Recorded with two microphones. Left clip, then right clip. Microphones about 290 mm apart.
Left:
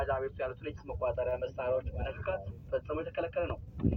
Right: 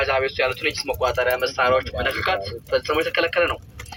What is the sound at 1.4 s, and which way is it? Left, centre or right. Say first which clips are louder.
Speech: right 14 dB; right.